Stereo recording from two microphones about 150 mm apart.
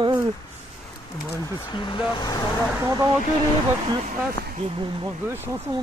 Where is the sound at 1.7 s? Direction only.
30° left (ahead or behind).